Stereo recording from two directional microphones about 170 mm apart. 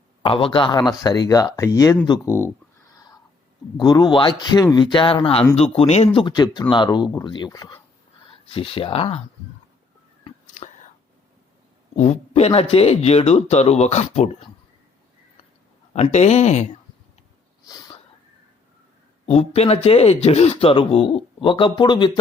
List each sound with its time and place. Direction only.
0.2 s speech: 30° left (ahead or behind); by 2.5 s 15° left (ahead or behind)
3.8 s speech: 25° left (ahead or behind)
6.1 s speech: 25° left (ahead or behind)
10.4 s whispering: 45° left (ahead or behind)
11.9 s speech: 40° left (ahead or behind)
15.9 s speech: 40° left (ahead or behind)
17.7 s a sound: 25° left (ahead or behind)
19.2 s speech: 35° left (ahead or behind)